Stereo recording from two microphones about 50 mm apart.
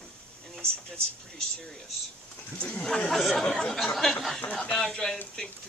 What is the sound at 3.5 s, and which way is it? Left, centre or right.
Speech, centre.